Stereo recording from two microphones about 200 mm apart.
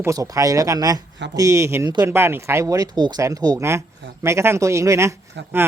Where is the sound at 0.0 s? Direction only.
15° right (ahead or behind).